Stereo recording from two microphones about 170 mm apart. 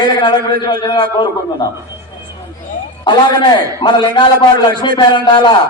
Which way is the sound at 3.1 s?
25° left (ahead or behind).